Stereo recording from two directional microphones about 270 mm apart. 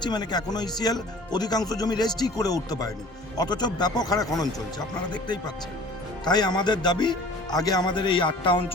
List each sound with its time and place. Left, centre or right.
0.0 s speech: centre
6.2 s speech: centre